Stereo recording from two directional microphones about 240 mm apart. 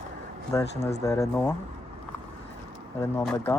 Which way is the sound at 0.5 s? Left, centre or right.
Centre.